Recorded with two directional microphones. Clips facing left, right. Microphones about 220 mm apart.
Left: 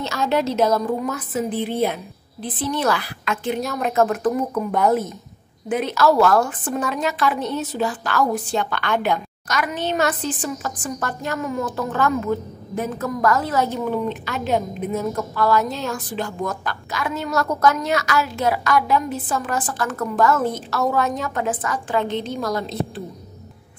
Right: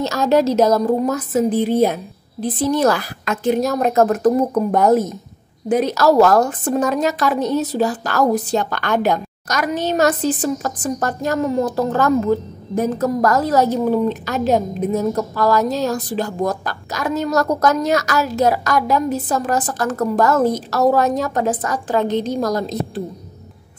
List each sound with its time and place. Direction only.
0.0 s a woman's voice: 40° right (ahead or behind)